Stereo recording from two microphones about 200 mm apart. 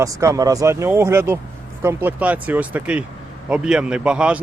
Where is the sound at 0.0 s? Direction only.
15° right (ahead or behind).